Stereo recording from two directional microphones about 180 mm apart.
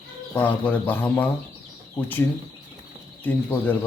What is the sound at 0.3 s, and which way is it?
Speech, 10° left (ahead or behind).